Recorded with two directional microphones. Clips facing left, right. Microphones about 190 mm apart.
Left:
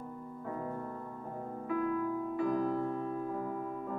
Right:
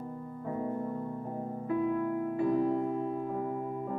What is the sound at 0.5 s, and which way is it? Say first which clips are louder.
Music: right 6 dB; 20° right (ahead or behind).